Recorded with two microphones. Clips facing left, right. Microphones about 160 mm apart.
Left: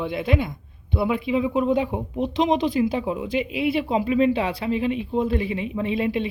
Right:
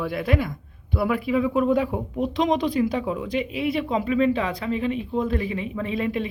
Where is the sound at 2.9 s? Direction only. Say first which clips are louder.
Left 1 dB; 25° left (ahead or behind).